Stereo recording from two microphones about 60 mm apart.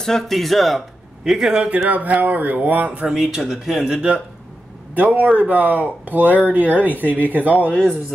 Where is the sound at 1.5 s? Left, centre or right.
Centre.